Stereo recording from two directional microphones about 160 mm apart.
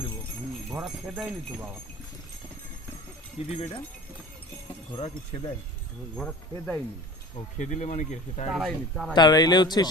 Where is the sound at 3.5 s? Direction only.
40° left (ahead or behind).